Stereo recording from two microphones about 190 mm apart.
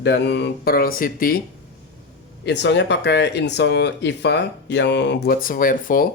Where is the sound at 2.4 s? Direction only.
65° left (ahead or behind); by 6.1 s 45° left (ahead or behind).